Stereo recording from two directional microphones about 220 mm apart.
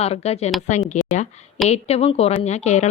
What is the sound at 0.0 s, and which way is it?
A woman's voice, 30° left (ahead or behind).